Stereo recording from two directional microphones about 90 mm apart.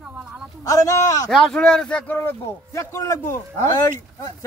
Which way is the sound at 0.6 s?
40° left (ahead or behind).